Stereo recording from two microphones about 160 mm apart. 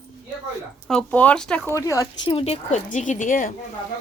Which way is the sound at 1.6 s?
20° left (ahead or behind).